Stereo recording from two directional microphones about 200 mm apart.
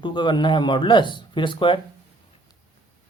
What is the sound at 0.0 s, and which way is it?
Speech, 25° left (ahead or behind).